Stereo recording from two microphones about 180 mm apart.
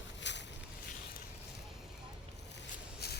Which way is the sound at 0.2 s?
75° left (ahead or behind).